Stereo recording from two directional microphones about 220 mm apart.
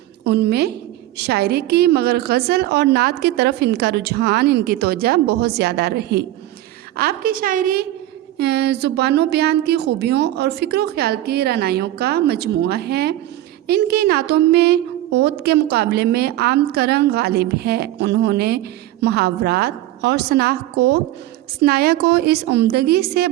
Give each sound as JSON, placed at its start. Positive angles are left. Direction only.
{"t": 0.3, "sound": "a woman's voice", "side_deg": -50}